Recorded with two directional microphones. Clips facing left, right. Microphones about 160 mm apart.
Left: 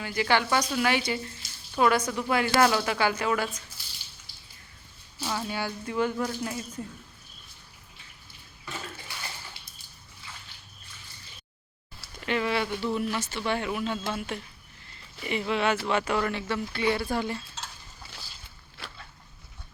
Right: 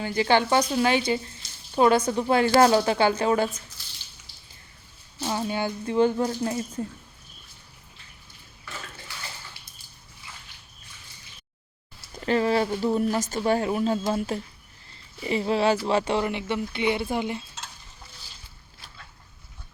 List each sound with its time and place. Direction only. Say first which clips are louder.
0.0 s a woman's voice: right 4 dB; 25° right (ahead or behind)
5.2 s a woman's voice: right 4 dB; 25° right (ahead or behind)
12.1 s speech: right 5 dB; 35° right (ahead or behind)
16.2 s a woman's voice: right 2 dB; 20° right (ahead or behind)
18.8 s a sound: left 8 dB; 70° left (ahead or behind)